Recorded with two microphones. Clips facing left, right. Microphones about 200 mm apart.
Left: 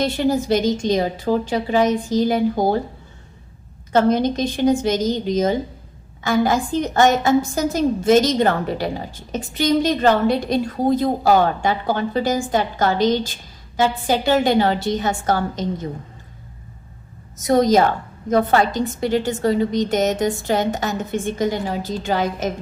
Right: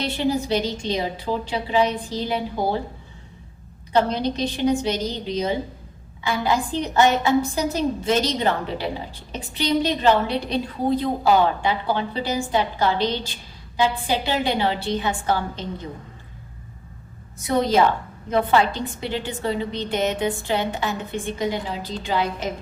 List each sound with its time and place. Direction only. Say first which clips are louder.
0.0 s a woman's voice: left 4 dB; 45° left (ahead or behind)
3.9 s a woman's voice: left 5 dB; 45° left (ahead or behind)
17.3 s a woman's voice: left 4 dB; 40° left (ahead or behind)